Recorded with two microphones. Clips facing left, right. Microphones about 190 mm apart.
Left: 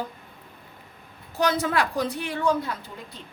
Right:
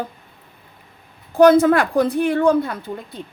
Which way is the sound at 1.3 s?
55° right (ahead or behind).